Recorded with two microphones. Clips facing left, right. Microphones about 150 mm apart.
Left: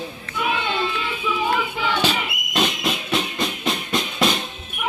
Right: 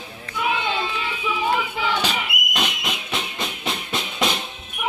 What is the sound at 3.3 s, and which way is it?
Music, 25° right (ahead or behind).